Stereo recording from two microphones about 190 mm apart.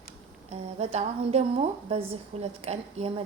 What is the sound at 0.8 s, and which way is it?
A woman's voice, 35° right (ahead or behind).